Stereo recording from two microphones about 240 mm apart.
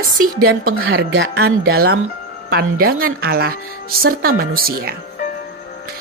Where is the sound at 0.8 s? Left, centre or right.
Right.